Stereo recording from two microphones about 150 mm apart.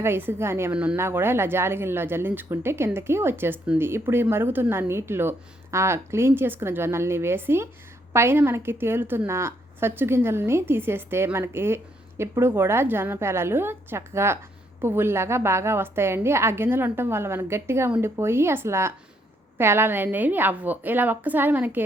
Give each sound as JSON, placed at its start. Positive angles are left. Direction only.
{"t": 0.0, "sound": "a woman's voice", "side_deg": -15}